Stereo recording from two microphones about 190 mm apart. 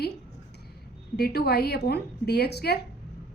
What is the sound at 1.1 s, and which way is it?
A woman's voice, 55° left (ahead or behind).